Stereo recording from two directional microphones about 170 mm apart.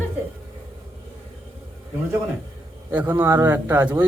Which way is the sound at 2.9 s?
10° right (ahead or behind).